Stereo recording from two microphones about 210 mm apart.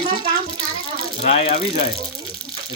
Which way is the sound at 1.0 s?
25° left (ahead or behind).